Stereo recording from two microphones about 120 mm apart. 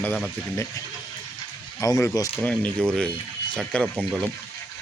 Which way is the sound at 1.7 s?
25° left (ahead or behind).